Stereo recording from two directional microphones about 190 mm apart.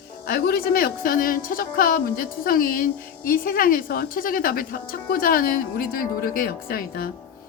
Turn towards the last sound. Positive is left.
turn(degrees=50)  # may be behind; listen again after turning